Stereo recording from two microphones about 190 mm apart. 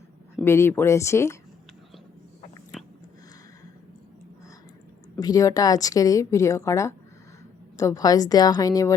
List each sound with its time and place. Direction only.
0.4 s a woman's voice: 15° left (ahead or behind)
5.2 s a woman's voice: 20° left (ahead or behind)